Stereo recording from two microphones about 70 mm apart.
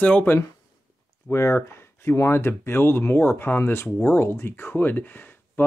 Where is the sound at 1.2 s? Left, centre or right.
Left.